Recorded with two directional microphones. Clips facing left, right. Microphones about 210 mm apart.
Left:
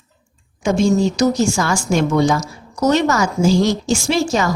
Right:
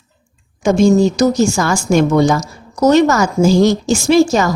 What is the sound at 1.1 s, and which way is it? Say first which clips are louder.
A woman's voice: right 3 dB; 40° right (ahead or behind).